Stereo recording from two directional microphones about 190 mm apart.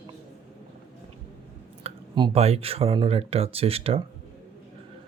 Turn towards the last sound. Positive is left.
turn(degrees=-30)  # may be behind; listen again after turning